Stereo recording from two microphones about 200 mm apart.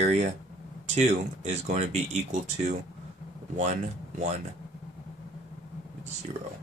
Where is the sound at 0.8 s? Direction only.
35° right (ahead or behind).